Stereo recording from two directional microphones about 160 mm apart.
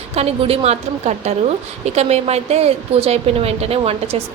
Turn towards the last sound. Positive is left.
turn(degrees=-40)  # may be behind; listen again after turning